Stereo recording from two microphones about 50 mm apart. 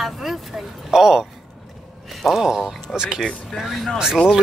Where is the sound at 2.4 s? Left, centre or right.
Centre.